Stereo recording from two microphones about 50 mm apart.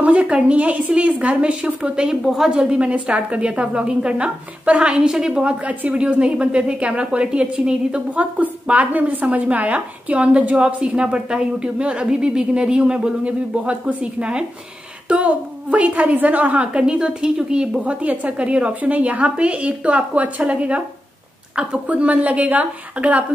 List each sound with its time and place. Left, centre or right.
0.0 s a woman's voice: right
8.4 s a woman's voice: right
16.8 s a woman's voice: centre
17.8 s a woman's voice: right